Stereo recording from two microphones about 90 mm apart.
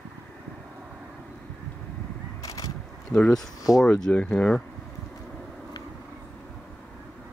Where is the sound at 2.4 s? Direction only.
40° left (ahead or behind).